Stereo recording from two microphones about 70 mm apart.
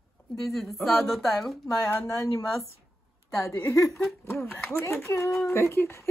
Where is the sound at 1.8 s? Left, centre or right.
Left.